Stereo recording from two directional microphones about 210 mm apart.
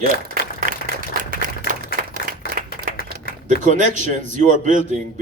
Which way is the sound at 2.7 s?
45° left (ahead or behind).